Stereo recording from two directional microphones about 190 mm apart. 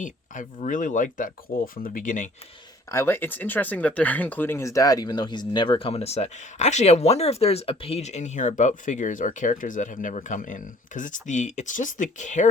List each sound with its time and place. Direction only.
0.0 s speech: 45° left (ahead or behind)
2.9 s speech: 15° left (ahead or behind); by 12.5 s 40° left (ahead or behind)